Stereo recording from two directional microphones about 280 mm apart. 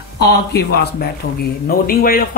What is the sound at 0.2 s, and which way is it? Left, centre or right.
Speech, left.